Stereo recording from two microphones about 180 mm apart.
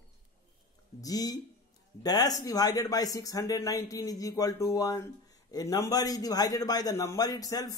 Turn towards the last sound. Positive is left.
turn(degrees=20)  # may be behind; listen again after turning